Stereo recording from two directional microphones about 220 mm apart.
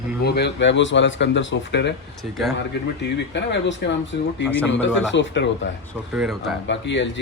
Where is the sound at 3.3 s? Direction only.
55° left (ahead or behind).